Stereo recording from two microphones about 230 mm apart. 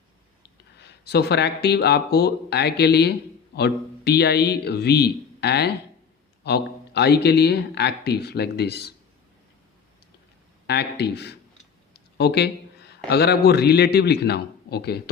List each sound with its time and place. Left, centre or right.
0.8 s speech: left
10.7 s speech: left
11.9 s a sound: left
13.1 s speech: left